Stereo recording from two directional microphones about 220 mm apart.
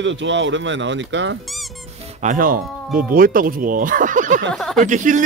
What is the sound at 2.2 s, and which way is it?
Speech, 35° right (ahead or behind).